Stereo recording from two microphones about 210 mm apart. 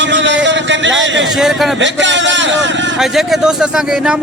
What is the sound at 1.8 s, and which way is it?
Speech, 60° right (ahead or behind).